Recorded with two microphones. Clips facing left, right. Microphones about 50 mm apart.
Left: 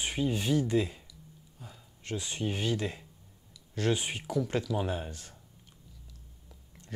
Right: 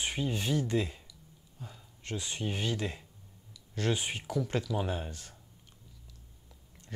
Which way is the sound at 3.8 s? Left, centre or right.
Centre.